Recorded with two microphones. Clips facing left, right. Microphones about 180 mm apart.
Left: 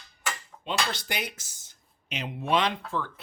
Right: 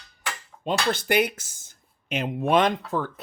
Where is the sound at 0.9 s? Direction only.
55° right (ahead or behind).